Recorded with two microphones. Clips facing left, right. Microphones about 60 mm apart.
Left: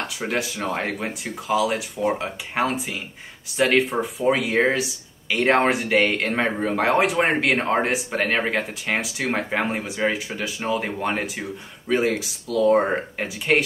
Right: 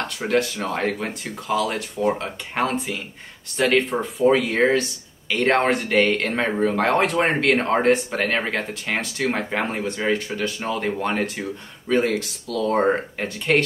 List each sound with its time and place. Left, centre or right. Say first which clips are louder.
0.0 s speech: right 4 dB; centre